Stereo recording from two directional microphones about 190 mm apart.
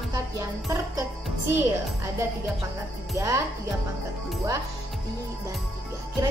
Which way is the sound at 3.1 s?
15° right (ahead or behind).